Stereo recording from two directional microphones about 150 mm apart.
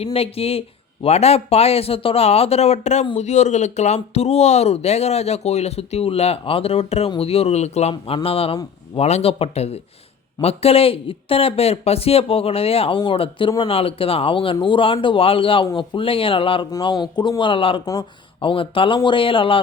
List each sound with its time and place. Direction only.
0.0 s speech: 40° left (ahead or behind)